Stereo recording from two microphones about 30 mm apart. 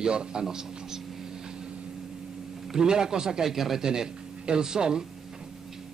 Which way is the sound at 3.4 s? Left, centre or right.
Centre.